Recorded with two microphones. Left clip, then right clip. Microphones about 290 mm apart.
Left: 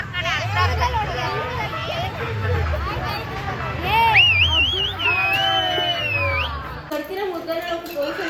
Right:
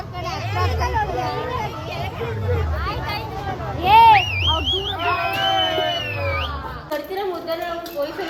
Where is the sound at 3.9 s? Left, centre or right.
Centre.